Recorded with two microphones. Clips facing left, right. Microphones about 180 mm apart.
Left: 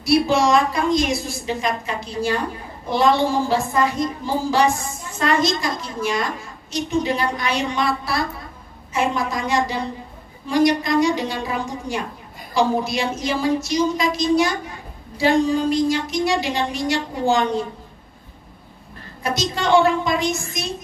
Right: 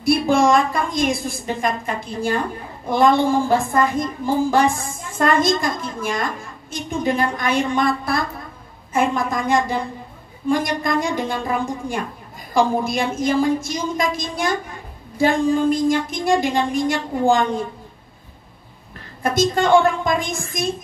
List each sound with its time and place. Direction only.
0.0 s a woman's voice: 50° right (ahead or behind)
19.2 s a woman's voice: 50° right (ahead or behind)